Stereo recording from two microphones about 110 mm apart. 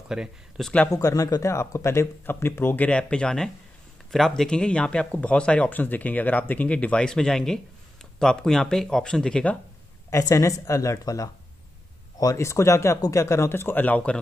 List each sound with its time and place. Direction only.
0.1 s speech: 5° right (ahead or behind)
0.9 s speech: 30° left (ahead or behind); by 9.6 s 10° left (ahead or behind)
10.0 s speech: 30° left (ahead or behind); by 14.2 s 10° left (ahead or behind)